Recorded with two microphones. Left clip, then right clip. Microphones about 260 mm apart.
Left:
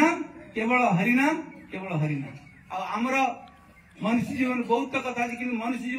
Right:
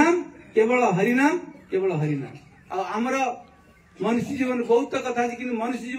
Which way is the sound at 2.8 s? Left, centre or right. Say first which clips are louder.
Right 1 dB; centre.